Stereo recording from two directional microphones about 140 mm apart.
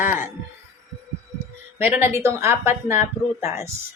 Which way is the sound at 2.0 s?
20° right (ahead or behind).